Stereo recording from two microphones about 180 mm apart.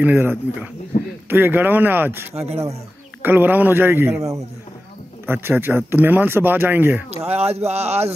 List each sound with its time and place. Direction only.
0.0 s speech: 10° right (ahead or behind)
2.3 s speech: 35° right (ahead or behind)
3.2 s speech: 10° right (ahead or behind)
7.2 s speech: 35° right (ahead or behind)